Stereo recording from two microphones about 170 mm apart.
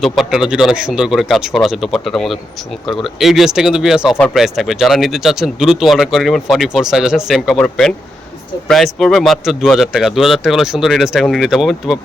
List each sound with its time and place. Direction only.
0.0 s speech: 5° right (ahead or behind)